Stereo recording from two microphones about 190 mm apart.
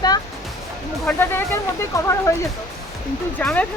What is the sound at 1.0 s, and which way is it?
Speech, 10° left (ahead or behind).